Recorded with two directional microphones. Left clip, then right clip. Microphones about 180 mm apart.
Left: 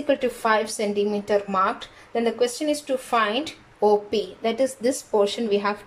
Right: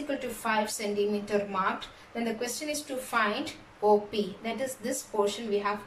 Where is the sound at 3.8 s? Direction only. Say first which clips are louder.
Left 5 dB; 55° left (ahead or behind).